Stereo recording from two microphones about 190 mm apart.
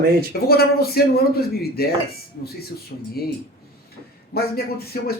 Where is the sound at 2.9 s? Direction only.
50° left (ahead or behind).